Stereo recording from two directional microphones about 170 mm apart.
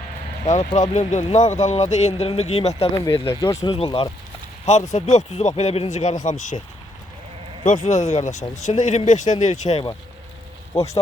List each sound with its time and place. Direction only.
0.4 s speech: 45° left (ahead or behind)
3.1 s speech: 15° left (ahead or behind)
3.7 s speech: 35° left (ahead or behind)
4.9 s speech: 45° left (ahead or behind)
7.6 s speech: 45° left (ahead or behind)
10.7 s speech: 15° left (ahead or behind)